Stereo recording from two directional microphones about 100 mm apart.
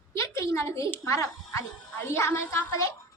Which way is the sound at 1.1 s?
35° left (ahead or behind).